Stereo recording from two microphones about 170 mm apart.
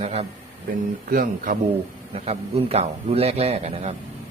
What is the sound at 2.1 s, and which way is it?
A man's voice, 35° right (ahead or behind).